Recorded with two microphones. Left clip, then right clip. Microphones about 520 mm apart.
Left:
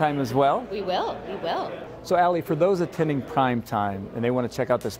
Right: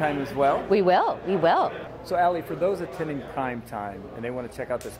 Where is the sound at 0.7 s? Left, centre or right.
Right.